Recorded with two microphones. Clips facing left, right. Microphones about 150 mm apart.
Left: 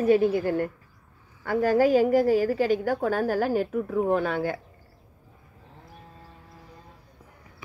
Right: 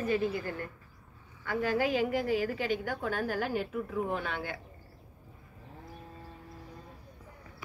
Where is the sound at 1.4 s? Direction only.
40° left (ahead or behind).